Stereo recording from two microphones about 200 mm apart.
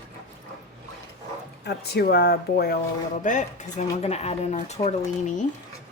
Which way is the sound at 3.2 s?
40° left (ahead or behind).